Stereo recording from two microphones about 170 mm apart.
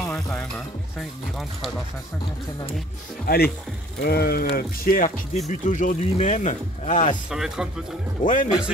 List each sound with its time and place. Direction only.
0.1 s music: 5° left (ahead or behind)
3.3 s speech: 65° left (ahead or behind); by 7.2 s 45° left (ahead or behind)
7.2 s speech: 5° right (ahead or behind)
8.2 s speech: 50° left (ahead or behind)